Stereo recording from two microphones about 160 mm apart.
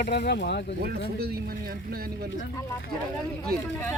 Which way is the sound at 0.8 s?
75° right (ahead or behind).